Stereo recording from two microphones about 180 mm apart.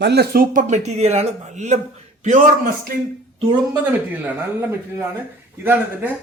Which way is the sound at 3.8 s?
10° right (ahead or behind).